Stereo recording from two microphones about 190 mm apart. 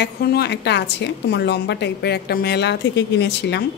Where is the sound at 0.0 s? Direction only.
60° left (ahead or behind).